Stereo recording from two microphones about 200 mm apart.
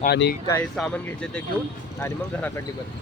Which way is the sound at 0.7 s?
5° left (ahead or behind).